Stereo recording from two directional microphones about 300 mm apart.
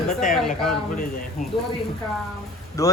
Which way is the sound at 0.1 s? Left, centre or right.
Left.